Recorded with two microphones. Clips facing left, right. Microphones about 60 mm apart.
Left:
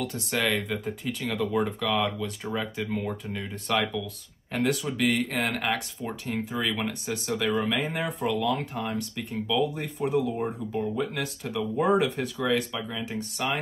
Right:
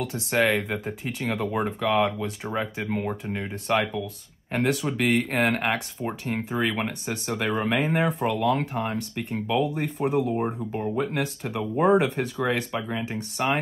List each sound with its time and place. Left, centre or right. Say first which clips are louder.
0.3 s speech: right 5 dB; right
5.7 s speech: right 2 dB; right